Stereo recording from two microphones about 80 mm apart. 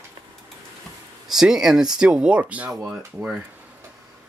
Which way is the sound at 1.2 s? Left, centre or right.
Centre.